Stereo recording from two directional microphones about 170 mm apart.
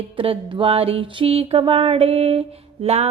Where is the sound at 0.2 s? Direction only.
30° right (ahead or behind).